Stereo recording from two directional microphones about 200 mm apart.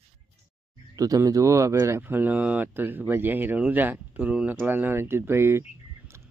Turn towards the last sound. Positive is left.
turn(degrees=-10)  # may be behind; listen again after turning